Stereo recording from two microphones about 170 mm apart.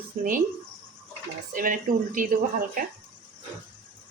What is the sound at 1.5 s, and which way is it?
Speech, 55° right (ahead or behind).